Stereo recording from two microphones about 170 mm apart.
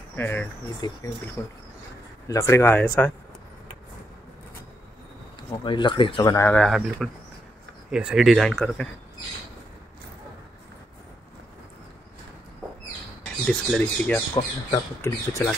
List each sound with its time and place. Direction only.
0.1 s speech: 10° left (ahead or behind)
0.7 s speech: 25° left (ahead or behind)
1.4 s speech: 10° left (ahead or behind)
5.5 s speech: 30° left (ahead or behind)
6.3 s speech: 10° left (ahead or behind)
13.2 s speech: 5° left (ahead or behind)
14.3 s speech: 20° left (ahead or behind)